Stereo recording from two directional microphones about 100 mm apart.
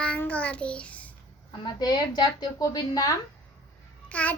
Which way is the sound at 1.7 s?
45° left (ahead or behind).